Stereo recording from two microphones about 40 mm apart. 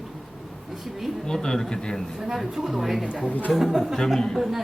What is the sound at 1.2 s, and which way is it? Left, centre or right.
Speech, centre.